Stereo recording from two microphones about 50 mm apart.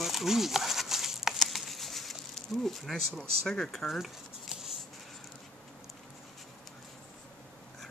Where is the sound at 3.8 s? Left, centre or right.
Centre.